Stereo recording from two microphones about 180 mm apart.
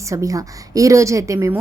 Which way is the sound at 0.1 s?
20° right (ahead or behind).